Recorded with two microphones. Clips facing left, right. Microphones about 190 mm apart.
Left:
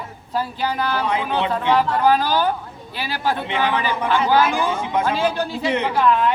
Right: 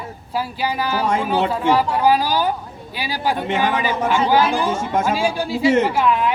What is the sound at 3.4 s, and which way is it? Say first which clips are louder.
Speech: right 2 dB; 45° right (ahead or behind).